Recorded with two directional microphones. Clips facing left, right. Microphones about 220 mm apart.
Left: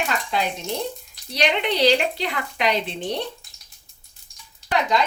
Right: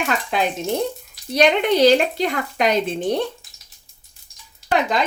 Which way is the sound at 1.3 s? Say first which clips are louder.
Right 6 dB; 50° right (ahead or behind).